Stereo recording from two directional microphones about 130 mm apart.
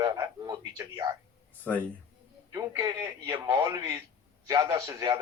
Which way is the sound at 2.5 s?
25° right (ahead or behind).